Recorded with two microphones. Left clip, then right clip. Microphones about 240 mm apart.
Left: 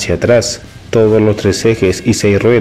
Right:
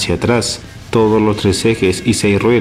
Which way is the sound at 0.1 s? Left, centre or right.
Centre.